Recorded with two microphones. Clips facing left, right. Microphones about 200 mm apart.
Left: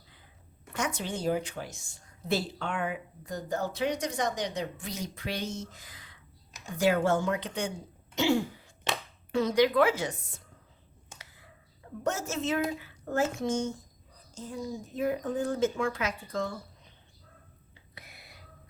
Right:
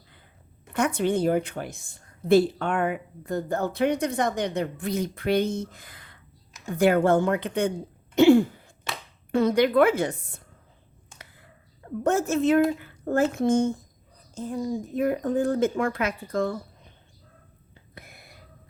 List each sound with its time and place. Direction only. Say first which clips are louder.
0.7 s a woman's voice: right 10 dB; 55° right (ahead or behind)
8.1 s throat clearing: right 10 dB; 55° right (ahead or behind)
9.3 s a woman's voice: right 4 dB; 55° right (ahead or behind)
12.0 s a woman's voice: right 9 dB; 55° right (ahead or behind)
17.9 s whispering: right 5 dB; 50° right (ahead or behind)